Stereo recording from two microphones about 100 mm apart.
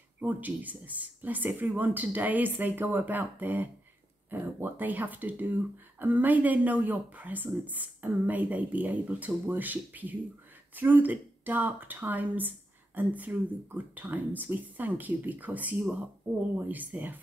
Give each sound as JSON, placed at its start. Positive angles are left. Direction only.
{"t": 0.2, "sound": "speech", "side_deg": -15}